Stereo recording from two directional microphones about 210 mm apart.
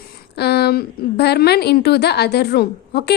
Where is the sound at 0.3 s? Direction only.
50° left (ahead or behind).